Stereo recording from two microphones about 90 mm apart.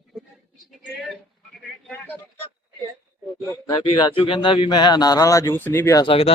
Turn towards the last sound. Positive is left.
turn(degrees=90)